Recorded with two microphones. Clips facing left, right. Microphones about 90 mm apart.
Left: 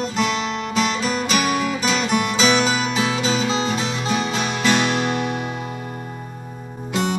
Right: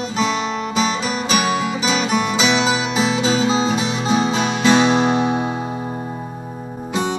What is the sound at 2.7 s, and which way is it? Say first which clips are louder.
Music: right 2 dB; 20° right (ahead or behind).